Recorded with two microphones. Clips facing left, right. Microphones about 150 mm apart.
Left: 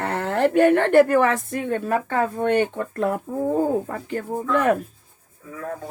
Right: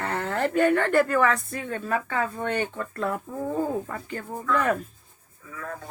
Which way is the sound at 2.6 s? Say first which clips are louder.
Left 5 dB; 40° left (ahead or behind).